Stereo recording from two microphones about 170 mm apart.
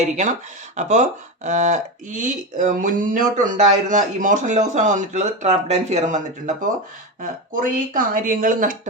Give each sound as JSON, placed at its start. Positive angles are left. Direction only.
{"t": 0.8, "sound": "speech", "side_deg": -45}